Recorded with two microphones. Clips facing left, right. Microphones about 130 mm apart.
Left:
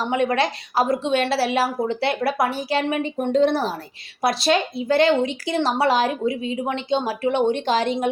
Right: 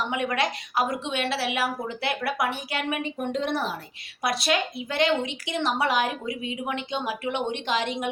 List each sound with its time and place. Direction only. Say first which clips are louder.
0.0 s speech: left 6 dB; 35° left (ahead or behind)